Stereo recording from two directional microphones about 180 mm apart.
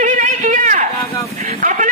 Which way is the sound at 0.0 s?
45° right (ahead or behind).